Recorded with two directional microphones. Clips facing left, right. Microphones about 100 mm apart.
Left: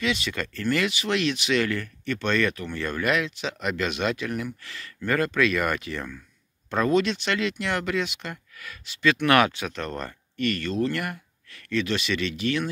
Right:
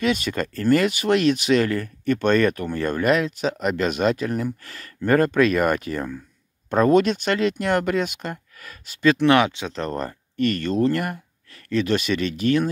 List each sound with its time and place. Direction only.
0.0 s speech: 45° right (ahead or behind)
9.2 s speech: 20° right (ahead or behind)
9.8 s speech: 35° right (ahead or behind)